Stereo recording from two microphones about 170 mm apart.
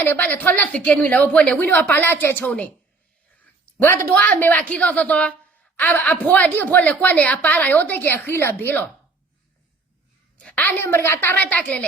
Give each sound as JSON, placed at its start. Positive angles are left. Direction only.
{"t": 0.0, "sound": "a woman's voice", "side_deg": 10}
{"t": 10.4, "sound": "a woman's voice", "side_deg": 10}